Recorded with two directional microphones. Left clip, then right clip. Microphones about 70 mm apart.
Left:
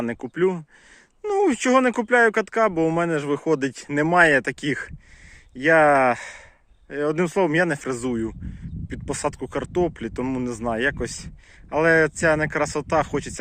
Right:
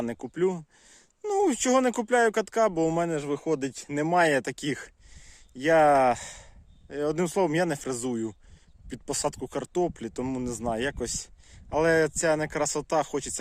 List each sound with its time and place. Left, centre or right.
0.0 s speech: right
3.1 s speech: centre
4.1 s speech: right
8.9 s speech: right